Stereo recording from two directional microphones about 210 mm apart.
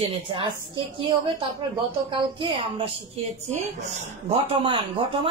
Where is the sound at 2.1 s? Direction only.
25° right (ahead or behind).